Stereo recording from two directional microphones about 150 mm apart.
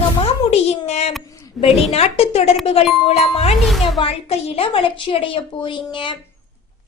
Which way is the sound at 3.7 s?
Centre (ahead or behind).